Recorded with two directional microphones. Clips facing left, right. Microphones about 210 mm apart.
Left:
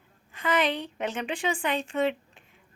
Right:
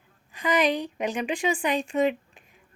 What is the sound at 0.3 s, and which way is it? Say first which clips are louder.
Speech: right 3 dB; 15° right (ahead or behind).